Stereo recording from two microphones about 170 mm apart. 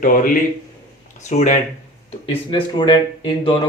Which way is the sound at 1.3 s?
45° left (ahead or behind).